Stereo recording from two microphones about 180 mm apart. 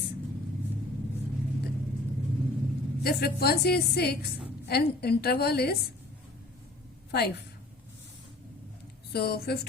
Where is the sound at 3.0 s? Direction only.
60° left (ahead or behind).